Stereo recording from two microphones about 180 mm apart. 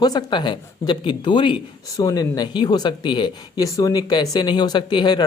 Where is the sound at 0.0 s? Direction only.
20° left (ahead or behind).